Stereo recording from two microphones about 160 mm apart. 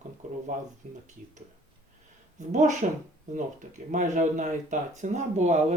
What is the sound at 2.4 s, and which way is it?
Speech, 50° right (ahead or behind).